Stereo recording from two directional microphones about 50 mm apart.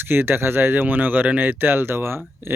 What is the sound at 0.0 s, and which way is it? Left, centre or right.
Speech, right.